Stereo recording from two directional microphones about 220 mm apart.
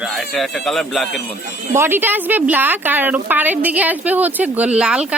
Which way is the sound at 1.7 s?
10° right (ahead or behind).